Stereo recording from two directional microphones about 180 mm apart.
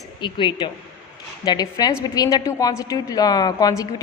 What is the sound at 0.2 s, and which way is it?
A woman's voice, 25° left (ahead or behind).